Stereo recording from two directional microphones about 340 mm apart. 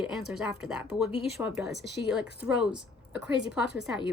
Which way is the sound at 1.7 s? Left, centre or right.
Left.